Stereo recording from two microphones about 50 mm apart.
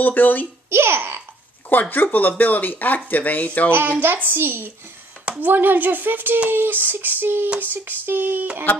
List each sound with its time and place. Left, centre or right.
0.0 s speech: left
0.7 s female singing: right
1.7 s speech: left
4.0 s female singing: right
5.4 s speech: right
6.5 s female singing: right
7.6 s speech: right